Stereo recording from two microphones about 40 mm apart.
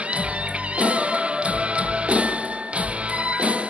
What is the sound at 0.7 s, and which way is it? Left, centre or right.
Music, right.